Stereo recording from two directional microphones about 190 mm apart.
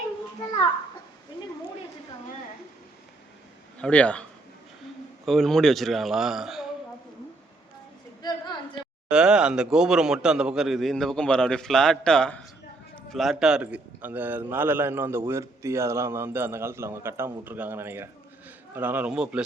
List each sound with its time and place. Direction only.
3.8 s a man's voice: 5° left (ahead or behind)
8.2 s a sound: 25° left (ahead or behind)
9.0 s a man's voice: 5° right (ahead or behind)